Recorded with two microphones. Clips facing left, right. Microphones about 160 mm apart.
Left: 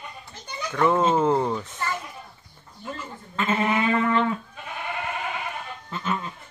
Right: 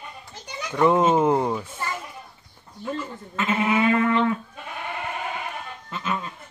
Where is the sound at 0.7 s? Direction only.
15° right (ahead or behind).